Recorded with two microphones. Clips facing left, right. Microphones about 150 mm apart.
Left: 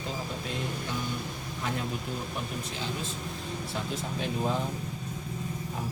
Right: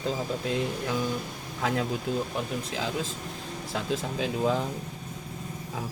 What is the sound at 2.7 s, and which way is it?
Speech, 90° right.